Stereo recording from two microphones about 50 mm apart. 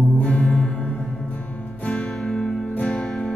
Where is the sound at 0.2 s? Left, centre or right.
Left.